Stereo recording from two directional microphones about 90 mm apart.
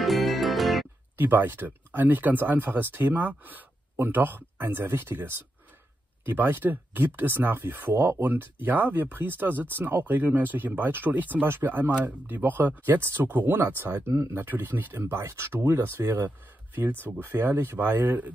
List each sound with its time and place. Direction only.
0.0 s music: centre (ahead or behind)
1.1 s speech: 20° right (ahead or behind)